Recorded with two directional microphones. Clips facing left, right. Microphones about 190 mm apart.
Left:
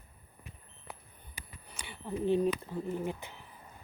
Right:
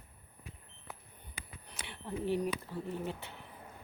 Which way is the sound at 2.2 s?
20° left (ahead or behind).